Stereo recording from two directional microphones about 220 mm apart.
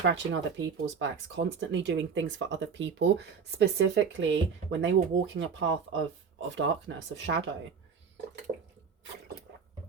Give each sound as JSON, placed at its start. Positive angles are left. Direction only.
{"t": 0.0, "sound": "speech", "side_deg": -55}